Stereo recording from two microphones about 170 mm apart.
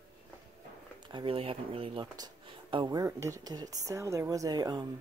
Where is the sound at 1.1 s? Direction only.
30° right (ahead or behind).